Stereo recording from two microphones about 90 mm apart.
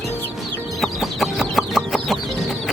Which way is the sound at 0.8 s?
Centre (ahead or behind).